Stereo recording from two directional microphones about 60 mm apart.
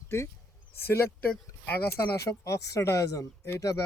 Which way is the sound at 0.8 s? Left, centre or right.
Left.